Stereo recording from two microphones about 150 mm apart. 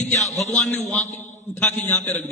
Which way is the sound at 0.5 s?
10° left (ahead or behind).